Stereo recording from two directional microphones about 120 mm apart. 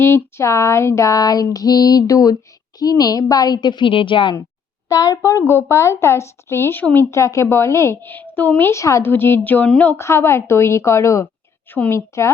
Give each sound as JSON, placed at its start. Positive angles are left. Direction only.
{"t": 0.0, "sound": "a woman's voice", "side_deg": 20}
{"t": 4.9, "sound": "speech", "side_deg": 30}